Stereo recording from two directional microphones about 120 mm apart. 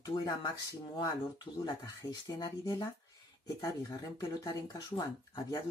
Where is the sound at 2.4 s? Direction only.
30° left (ahead or behind).